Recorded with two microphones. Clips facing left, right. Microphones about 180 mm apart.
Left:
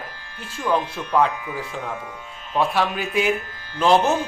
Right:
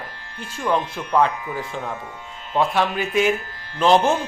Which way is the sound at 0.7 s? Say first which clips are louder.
Even; 10° left (ahead or behind).